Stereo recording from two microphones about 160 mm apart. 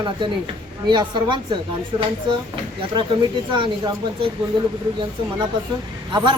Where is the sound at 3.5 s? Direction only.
30° right (ahead or behind).